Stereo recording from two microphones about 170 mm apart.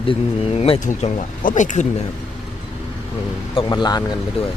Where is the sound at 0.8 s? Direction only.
45° left (ahead or behind).